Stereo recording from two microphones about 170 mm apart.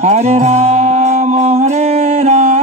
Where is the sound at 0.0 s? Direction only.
40° right (ahead or behind).